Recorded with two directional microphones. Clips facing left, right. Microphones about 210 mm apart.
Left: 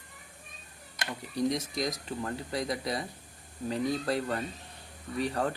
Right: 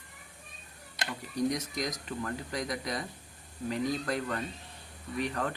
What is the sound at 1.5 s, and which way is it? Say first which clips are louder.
Speech: left 3 dB; 30° left (ahead or behind).